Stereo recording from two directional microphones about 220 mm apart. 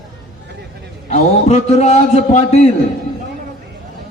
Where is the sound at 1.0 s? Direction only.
30° left (ahead or behind).